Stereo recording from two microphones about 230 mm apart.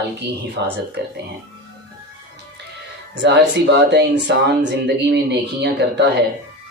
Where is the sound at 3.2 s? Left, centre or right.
Right.